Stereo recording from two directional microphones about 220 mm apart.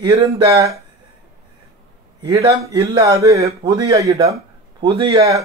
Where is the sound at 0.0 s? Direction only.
15° right (ahead or behind).